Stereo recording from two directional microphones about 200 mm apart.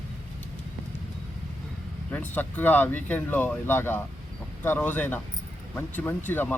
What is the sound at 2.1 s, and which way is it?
Speech, 10° left (ahead or behind).